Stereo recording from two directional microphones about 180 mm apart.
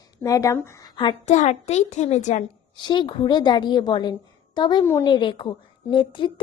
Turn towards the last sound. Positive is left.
turn(degrees=30)  # may be behind; listen again after turning